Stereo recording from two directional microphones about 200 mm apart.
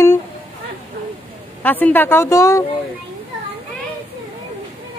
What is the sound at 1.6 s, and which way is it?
A woman's voice, 10° left (ahead or behind).